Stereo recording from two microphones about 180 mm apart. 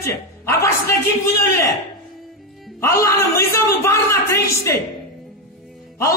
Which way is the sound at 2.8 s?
15° left (ahead or behind).